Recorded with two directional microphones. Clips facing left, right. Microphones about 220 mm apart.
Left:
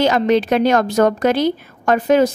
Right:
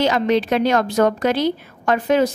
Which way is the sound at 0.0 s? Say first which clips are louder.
Left 3 dB; 45° left (ahead or behind).